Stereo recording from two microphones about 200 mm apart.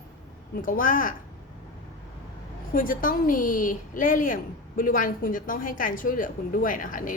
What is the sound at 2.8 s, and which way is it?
A woman's voice, 45° left (ahead or behind).